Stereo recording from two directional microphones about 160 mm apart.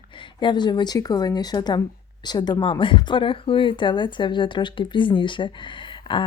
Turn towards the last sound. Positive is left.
turn(degrees=30)  # may be behind; listen again after turning